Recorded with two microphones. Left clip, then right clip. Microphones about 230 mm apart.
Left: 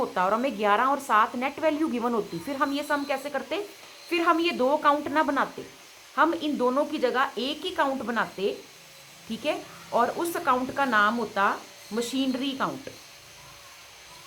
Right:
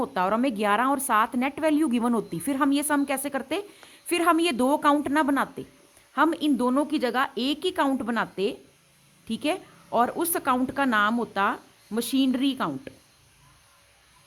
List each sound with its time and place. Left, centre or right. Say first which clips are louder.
0.0 s speech: even; right